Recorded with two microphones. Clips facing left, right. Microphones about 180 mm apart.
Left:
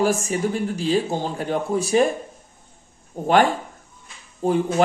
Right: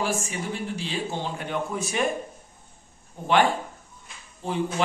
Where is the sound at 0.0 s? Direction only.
45° left (ahead or behind).